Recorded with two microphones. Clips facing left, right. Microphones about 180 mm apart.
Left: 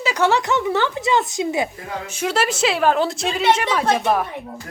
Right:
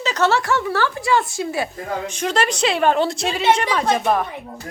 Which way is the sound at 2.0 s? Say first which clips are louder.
Left 1 dB; 5° left (ahead or behind).